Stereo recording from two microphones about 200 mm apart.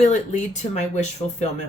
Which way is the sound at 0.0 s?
35° left (ahead or behind).